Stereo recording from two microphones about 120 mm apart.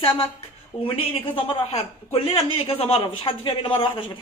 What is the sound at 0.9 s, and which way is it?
A woman's voice, 45° left (ahead or behind).